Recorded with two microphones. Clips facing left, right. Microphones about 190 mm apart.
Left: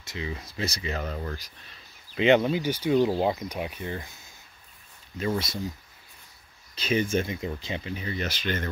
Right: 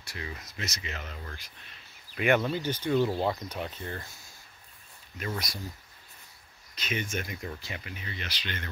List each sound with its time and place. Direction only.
0.0 s speech: 20° left (ahead or behind); by 1.5 s 40° left (ahead or behind)
2.1 s speech: 20° left (ahead or behind)
5.2 s speech: 25° left (ahead or behind)
6.7 s speech: 30° left (ahead or behind)